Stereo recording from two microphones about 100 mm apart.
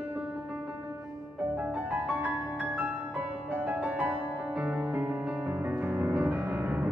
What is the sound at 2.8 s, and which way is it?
Music, 20° right (ahead or behind).